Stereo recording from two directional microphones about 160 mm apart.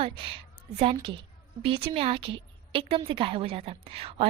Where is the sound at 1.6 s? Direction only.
35° right (ahead or behind).